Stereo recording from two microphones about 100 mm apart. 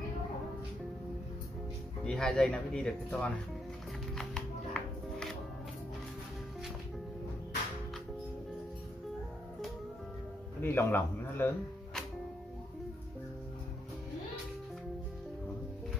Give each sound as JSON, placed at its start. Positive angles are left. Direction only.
{"t": 2.0, "sound": "speech", "side_deg": 5}
{"t": 4.2, "sound": "music", "side_deg": 5}
{"t": 10.6, "sound": "a man's voice", "side_deg": 20}